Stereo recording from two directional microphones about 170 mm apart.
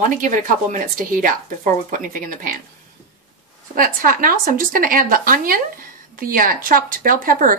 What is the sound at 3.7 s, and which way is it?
Speech, 55° right (ahead or behind).